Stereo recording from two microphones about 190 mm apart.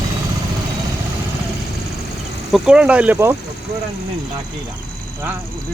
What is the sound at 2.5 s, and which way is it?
Speech, 5° right (ahead or behind).